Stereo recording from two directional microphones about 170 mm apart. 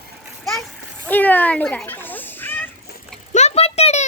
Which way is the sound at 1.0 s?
10° left (ahead or behind).